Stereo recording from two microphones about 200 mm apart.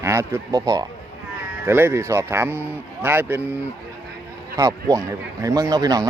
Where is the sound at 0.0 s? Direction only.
15° right (ahead or behind).